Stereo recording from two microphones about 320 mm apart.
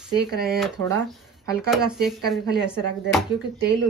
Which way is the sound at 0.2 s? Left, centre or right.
Right.